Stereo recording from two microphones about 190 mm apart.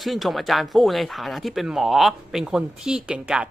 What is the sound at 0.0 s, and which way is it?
Speech, centre (ahead or behind).